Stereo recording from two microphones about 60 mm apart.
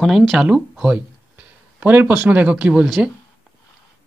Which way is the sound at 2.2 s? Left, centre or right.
Right.